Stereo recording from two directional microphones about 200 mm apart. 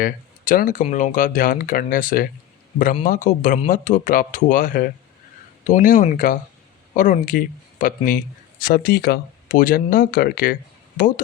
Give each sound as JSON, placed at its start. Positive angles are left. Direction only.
{"t": 0.0, "sound": "speech", "side_deg": 45}